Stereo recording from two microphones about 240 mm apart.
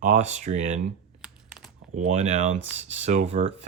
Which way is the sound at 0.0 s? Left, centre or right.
Right.